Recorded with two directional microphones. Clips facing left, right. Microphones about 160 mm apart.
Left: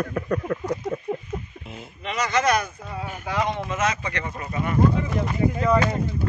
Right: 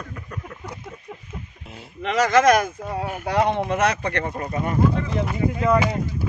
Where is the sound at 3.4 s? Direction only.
60° right (ahead or behind).